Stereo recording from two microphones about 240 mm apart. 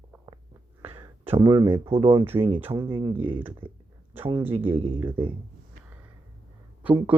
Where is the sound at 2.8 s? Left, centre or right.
Centre.